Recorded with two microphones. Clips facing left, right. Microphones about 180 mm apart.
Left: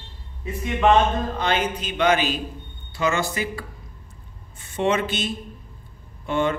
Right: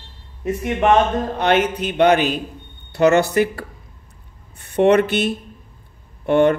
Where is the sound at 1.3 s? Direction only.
65° right (ahead or behind).